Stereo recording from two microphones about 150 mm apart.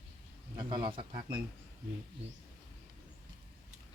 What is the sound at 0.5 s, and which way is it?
Vehicle, 30° right (ahead or behind).